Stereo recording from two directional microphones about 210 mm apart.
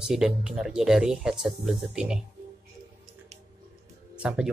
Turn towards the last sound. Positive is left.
turn(degrees=-5)  # may be behind; listen again after turning